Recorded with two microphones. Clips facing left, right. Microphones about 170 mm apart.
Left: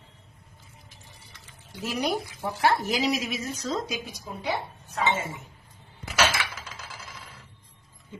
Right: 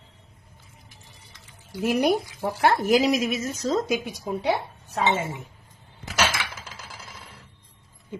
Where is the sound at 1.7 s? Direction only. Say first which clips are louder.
Right 7 dB; 55° right (ahead or behind).